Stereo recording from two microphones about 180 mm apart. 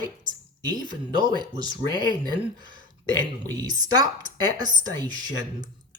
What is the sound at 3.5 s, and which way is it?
Speech, 20° right (ahead or behind).